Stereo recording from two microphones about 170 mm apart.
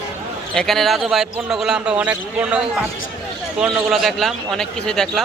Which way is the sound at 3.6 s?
5° right (ahead or behind).